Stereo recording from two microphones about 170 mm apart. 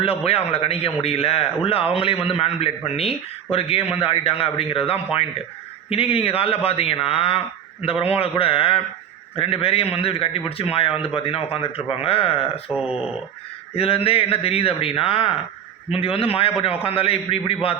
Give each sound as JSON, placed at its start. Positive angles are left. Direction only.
{"t": 0.3, "sound": "a man's voice", "side_deg": 35}
{"t": 12.7, "sound": "speech", "side_deg": -5}
{"t": 13.7, "sound": "a man's voice", "side_deg": 35}